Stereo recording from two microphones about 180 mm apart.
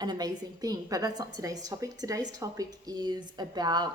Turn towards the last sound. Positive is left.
turn(degrees=-20)  # may be behind; listen again after turning